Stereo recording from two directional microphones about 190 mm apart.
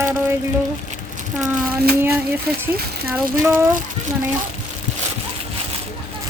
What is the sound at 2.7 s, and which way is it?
Speech, 50° right (ahead or behind).